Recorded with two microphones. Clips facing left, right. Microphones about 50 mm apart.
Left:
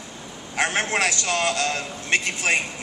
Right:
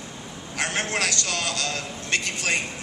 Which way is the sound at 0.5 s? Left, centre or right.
Left.